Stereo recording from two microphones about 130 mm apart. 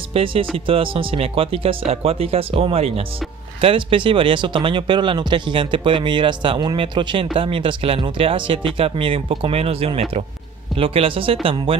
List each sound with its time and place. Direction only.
0.1 s speech: 45° right (ahead or behind)